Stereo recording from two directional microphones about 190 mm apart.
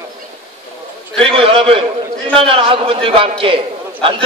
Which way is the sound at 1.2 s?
30° right (ahead or behind).